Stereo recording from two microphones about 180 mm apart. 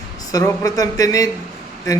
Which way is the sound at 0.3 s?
20° left (ahead or behind).